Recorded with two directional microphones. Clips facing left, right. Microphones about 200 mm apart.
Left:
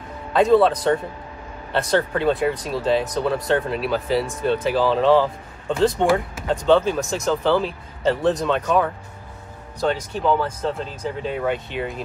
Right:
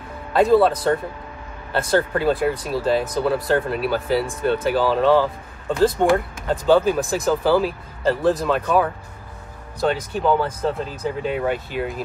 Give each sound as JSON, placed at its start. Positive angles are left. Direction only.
{"t": 0.3, "sound": "speech", "side_deg": -5}